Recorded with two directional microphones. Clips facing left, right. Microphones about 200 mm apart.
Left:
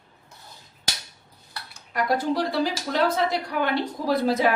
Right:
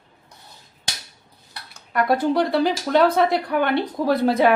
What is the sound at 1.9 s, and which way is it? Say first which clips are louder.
Speech: right 5 dB; 60° right (ahead or behind).